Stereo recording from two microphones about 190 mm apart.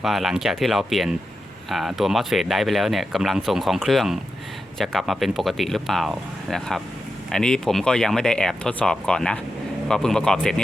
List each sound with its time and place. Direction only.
0.0 s speech: centre (ahead or behind)